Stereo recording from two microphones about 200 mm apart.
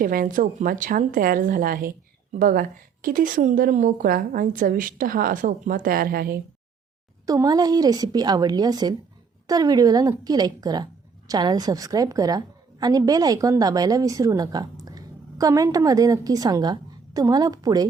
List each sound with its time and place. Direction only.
0.0 s a woman's voice: 45° right (ahead or behind)
7.3 s a woman's voice: 20° right (ahead or behind)